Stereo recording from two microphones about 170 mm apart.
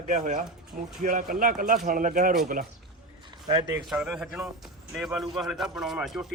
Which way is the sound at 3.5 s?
25° right (ahead or behind).